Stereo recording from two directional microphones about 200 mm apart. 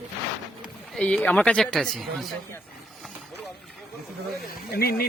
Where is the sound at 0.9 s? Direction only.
5° left (ahead or behind).